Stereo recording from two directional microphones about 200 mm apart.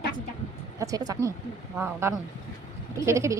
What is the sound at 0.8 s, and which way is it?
A woman's voice, 15° right (ahead or behind).